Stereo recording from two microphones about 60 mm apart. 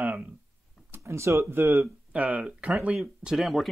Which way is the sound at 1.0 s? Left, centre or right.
Right.